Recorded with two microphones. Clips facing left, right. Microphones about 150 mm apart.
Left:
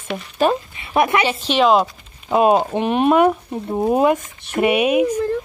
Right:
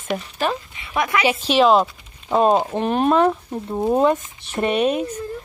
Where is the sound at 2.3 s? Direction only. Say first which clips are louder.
Left 2 dB; 10° left (ahead or behind).